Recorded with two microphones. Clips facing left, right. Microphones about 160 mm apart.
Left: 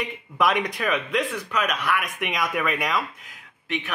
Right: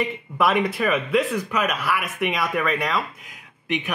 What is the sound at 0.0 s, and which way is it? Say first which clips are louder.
Speech: right 2 dB; 5° right (ahead or behind).